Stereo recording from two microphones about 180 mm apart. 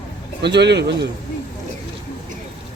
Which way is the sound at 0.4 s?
70° right (ahead or behind).